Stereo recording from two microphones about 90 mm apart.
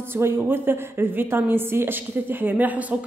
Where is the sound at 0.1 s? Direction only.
25° right (ahead or behind).